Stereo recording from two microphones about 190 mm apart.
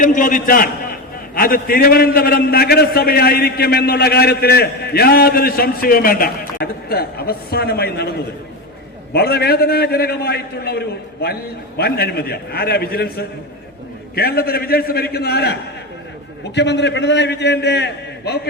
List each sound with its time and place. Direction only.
0.0 s a man's voice: 45° left (ahead or behind)
9.1 s a man's voice: 55° left (ahead or behind)
16.6 s a man's voice: 65° left (ahead or behind)